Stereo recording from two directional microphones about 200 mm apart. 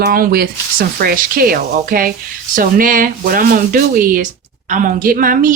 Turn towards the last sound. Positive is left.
turn(degrees=-40)  # may be behind; listen again after turning